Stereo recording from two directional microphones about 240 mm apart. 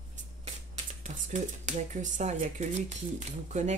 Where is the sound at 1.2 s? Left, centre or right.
Right.